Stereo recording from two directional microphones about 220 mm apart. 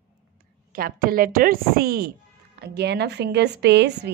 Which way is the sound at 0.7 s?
40° right (ahead or behind).